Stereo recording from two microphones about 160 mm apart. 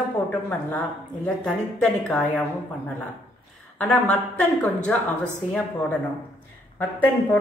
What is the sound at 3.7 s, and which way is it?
A woman's voice, 10° left (ahead or behind).